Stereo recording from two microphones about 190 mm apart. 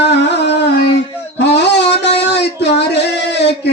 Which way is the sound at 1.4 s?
65° left (ahead or behind).